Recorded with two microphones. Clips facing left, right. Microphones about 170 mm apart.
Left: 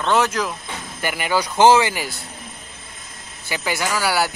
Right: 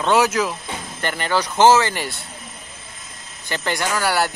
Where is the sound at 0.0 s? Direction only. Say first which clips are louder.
Right 2 dB; 10° right (ahead or behind).